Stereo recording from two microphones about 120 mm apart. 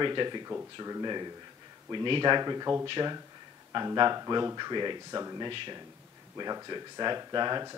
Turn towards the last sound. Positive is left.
turn(degrees=-35)  # may be behind; listen again after turning